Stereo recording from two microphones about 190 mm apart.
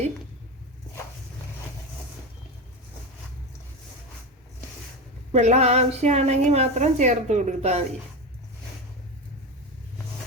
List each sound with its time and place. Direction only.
5.3 s a woman's voice: 35° right (ahead or behind)